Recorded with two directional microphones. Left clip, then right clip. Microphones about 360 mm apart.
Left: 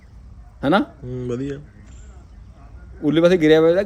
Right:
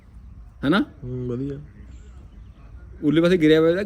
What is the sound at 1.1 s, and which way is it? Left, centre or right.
Speech, centre.